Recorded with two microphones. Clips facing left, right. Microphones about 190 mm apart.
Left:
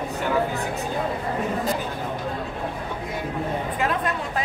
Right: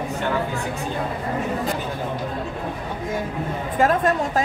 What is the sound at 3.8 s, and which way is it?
Speech, 45° right (ahead or behind).